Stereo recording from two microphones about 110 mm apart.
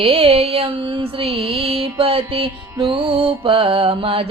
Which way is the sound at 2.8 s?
55° right (ahead or behind).